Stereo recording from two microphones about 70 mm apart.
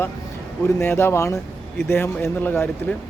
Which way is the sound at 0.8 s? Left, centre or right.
Left.